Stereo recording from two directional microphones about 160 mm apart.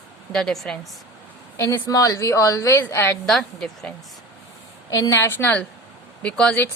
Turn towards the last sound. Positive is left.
turn(degrees=10)  # may be behind; listen again after turning